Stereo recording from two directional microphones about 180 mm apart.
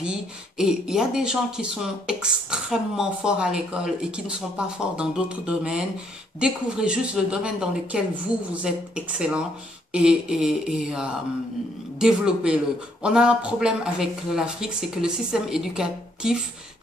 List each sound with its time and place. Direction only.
0.0 s speech: 5° right (ahead or behind)